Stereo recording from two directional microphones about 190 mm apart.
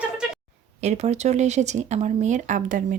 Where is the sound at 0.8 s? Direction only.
35° right (ahead or behind).